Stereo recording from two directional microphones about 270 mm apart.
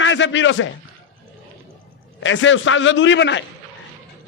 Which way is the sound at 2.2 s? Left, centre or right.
Left.